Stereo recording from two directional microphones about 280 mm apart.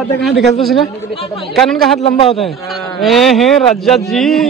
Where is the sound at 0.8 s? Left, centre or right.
Centre.